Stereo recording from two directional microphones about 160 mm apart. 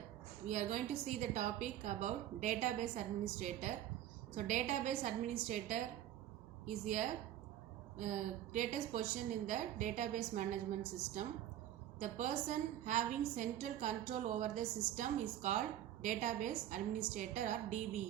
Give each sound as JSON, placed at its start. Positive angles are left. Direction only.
{"t": 0.4, "sound": "a woman's voice", "side_deg": -50}